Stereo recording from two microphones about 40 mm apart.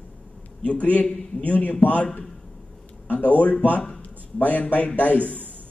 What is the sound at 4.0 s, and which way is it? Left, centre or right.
A man's voice, left.